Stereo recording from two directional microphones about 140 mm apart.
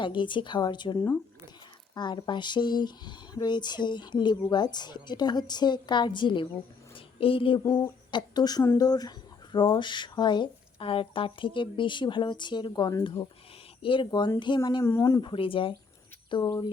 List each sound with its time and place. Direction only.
0.0 s speech: 35° left (ahead or behind)
0.9 s speech: 15° left (ahead or behind)
2.0 s speech: 30° left (ahead or behind)
6.9 s a sound: 40° left (ahead or behind)
7.7 s speech: 30° left (ahead or behind)
14.8 s speech: 20° left (ahead or behind)
15.2 s speech: 40° left (ahead or behind)
16.3 s speech: 30° left (ahead or behind)